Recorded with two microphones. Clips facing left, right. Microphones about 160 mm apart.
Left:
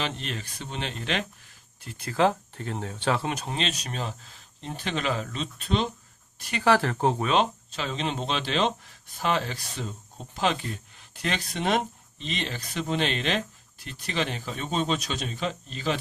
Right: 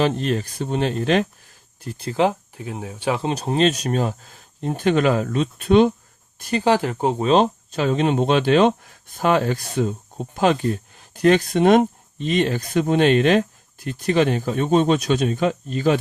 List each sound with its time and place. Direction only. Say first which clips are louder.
0.0 s speech: right 12 dB; 45° right (ahead or behind)
2.0 s speech: right 3 dB; 20° right (ahead or behind)
3.2 s speech: right 11 dB; 35° right (ahead or behind); by 5.9 s 55° right (ahead or behind)
6.7 s speech: right 3 dB; 15° right (ahead or behind)
7.3 s speech: right 7 dB; 45° right (ahead or behind)